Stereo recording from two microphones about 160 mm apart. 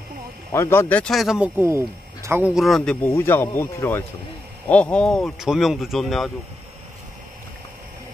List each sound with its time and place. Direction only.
0.5 s speech: 15° left (ahead or behind); by 1.5 s centre (ahead or behind)
1.6 s speech: 15° right (ahead or behind)
2.5 s speech: centre (ahead or behind)